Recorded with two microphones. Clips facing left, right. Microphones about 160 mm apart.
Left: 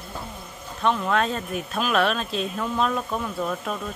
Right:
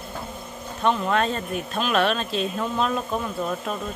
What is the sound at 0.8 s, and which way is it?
Speech, centre (ahead or behind).